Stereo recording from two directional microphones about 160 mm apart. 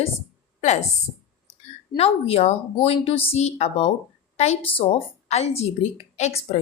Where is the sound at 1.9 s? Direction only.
40° left (ahead or behind).